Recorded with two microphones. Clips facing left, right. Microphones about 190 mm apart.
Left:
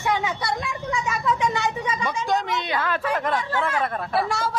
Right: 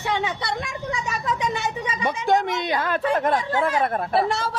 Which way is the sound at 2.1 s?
55° right (ahead or behind).